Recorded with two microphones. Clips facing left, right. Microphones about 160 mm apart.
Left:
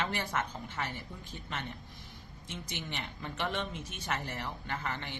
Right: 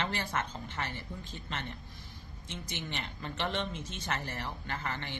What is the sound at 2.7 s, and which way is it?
Speech, 15° left (ahead or behind).